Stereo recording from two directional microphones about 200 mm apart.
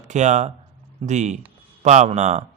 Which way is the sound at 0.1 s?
35° right (ahead or behind).